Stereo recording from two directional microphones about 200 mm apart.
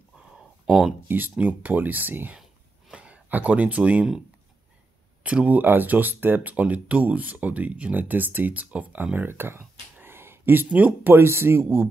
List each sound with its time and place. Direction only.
0.7 s speech: centre (ahead or behind)
5.2 s speech: 5° right (ahead or behind)